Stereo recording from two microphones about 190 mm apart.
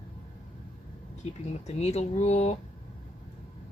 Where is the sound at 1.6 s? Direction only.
35° left (ahead or behind).